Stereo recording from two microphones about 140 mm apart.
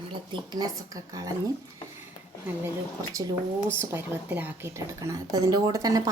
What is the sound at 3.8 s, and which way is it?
A woman's voice, 15° right (ahead or behind).